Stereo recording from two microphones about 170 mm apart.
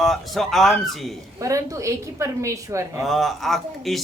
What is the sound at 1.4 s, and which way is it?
A woman's voice, 20° right (ahead or behind).